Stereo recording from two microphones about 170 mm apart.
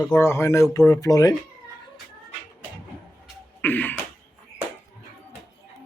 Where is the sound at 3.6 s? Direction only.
10° left (ahead or behind).